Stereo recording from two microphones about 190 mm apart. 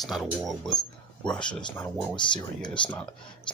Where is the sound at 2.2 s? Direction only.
25° left (ahead or behind).